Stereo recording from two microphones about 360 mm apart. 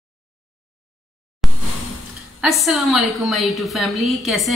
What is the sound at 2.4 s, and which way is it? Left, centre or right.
A woman's voice, centre.